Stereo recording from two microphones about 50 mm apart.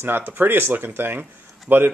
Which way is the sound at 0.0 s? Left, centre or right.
Right.